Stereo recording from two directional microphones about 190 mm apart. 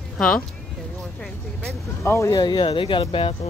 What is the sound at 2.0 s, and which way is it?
Speech, 15° left (ahead or behind).